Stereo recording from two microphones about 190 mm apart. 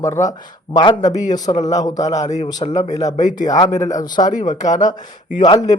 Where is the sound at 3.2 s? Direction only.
40° left (ahead or behind).